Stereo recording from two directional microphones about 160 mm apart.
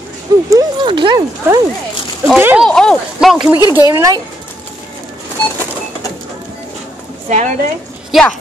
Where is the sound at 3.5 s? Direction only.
25° left (ahead or behind).